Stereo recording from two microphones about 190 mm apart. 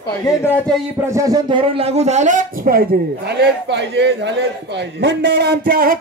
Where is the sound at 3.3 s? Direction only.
60° right (ahead or behind).